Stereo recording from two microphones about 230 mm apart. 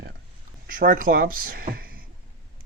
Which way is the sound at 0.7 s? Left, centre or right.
Right.